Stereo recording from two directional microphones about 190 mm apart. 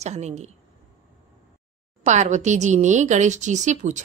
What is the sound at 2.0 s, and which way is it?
Speech, 40° right (ahead or behind).